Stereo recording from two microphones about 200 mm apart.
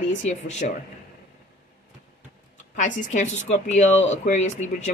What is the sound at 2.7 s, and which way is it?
Speech, 40° left (ahead or behind).